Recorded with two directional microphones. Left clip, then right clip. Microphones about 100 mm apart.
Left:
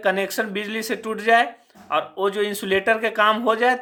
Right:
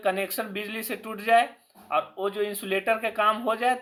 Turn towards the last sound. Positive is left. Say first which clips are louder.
# left 6 dB
turn(degrees=40)  # may be behind; listen again after turning